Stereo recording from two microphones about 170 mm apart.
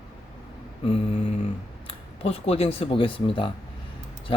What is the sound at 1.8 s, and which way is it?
Speech, 35° left (ahead or behind).